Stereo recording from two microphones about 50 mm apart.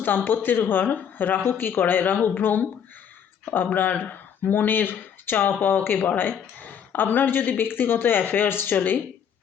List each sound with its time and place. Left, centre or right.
0.3 s speech: left